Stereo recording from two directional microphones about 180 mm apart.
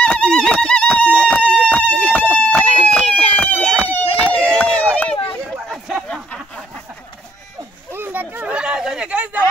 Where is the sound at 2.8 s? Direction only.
5° left (ahead or behind).